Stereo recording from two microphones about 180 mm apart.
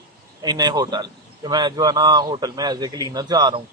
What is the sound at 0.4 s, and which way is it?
Speech, 20° right (ahead or behind).